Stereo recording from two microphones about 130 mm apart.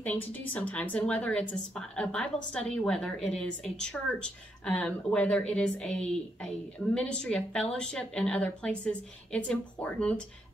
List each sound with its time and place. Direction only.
0.0 s a woman's voice: 15° left (ahead or behind)